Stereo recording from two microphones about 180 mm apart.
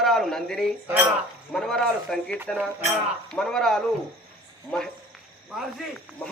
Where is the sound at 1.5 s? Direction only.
5° left (ahead or behind).